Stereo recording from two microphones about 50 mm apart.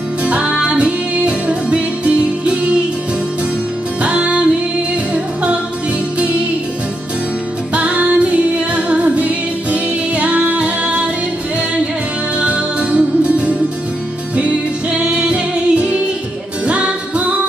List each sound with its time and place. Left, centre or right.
0.2 s music: right
4.0 s music: right
6.1 s music: right
7.7 s music: right
12.4 s music: right